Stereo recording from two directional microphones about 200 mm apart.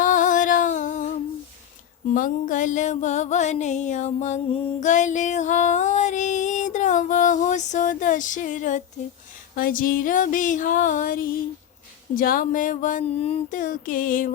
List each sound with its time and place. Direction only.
0.0 s music: 40° left (ahead or behind)
2.1 s music: 40° left (ahead or behind)
9.6 s a sound: 45° left (ahead or behind)